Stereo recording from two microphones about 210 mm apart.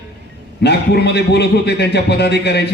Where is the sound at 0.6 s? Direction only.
50° left (ahead or behind).